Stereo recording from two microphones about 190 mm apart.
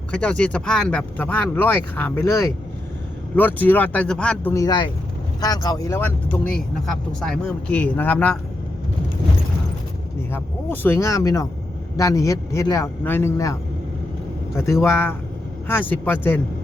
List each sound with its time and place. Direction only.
0.1 s speech: 5° left (ahead or behind)
4.5 s speech: 20° left (ahead or behind)
10.3 s speech: 10° left (ahead or behind)